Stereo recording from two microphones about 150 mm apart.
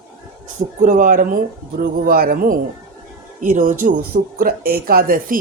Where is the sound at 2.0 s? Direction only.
80° right.